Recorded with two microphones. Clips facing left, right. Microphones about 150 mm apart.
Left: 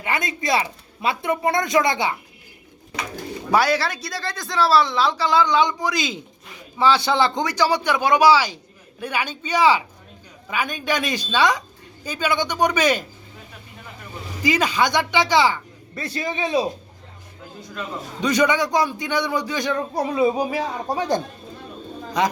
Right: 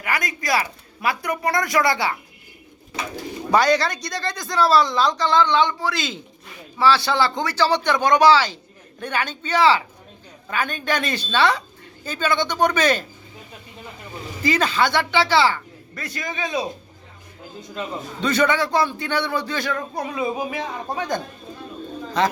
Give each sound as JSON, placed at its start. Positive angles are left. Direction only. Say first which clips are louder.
{"t": 0.0, "sound": "speech", "louder": "left 1 dB", "side_deg": 25}
{"t": 3.5, "sound": "speech", "louder": "right 2 dB", "side_deg": 5}
{"t": 14.4, "sound": "speech", "louder": "even", "side_deg": 10}
{"t": 16.0, "sound": "speech", "louder": "left 3 dB", "side_deg": 30}
{"t": 18.2, "sound": "speech", "louder": "left 1 dB", "side_deg": 15}
{"t": 20.0, "sound": "a sound", "louder": "left 7 dB", "side_deg": 35}
{"t": 22.2, "sound": "speech", "louder": "right 1 dB", "side_deg": 15}